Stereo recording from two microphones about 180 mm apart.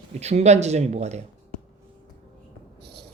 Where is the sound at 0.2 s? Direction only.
35° right (ahead or behind).